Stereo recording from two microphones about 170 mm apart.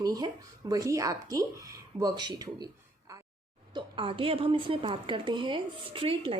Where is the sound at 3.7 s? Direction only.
30° right (ahead or behind).